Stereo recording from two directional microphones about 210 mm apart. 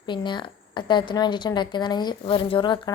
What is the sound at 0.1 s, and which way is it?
A woman's voice, 20° left (ahead or behind).